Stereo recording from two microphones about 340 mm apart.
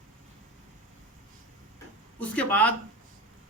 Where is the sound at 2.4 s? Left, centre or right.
Centre.